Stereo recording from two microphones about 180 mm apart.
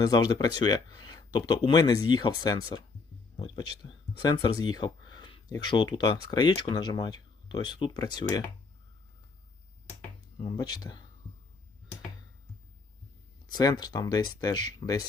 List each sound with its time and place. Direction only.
0.0 s speech: 20° left (ahead or behind)
10.3 s speech: 25° left (ahead or behind)
13.5 s speech: 20° left (ahead or behind)